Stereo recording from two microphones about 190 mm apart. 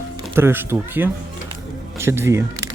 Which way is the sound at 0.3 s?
10° right (ahead or behind).